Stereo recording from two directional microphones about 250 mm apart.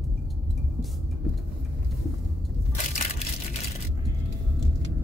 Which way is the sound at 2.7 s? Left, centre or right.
Left.